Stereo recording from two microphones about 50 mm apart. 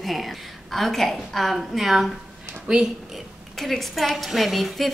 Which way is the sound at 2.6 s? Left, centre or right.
Centre.